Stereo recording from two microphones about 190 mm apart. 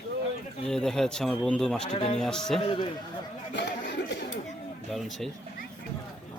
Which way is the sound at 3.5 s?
65° left (ahead or behind).